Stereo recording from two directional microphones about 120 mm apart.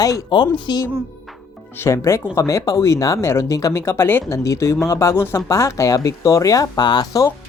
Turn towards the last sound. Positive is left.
turn(degrees=30)  # may be behind; listen again after turning